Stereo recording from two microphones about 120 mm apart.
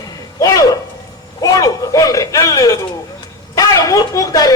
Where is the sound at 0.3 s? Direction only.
30° left (ahead or behind).